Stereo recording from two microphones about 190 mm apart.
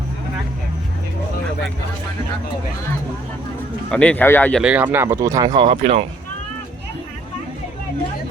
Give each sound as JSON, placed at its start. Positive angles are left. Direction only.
{"t": 3.9, "sound": "speech", "side_deg": 5}
{"t": 4.6, "sound": "speech", "side_deg": -10}